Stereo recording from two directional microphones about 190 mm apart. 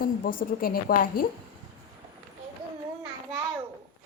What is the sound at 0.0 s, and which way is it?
A woman's voice, 50° left (ahead or behind).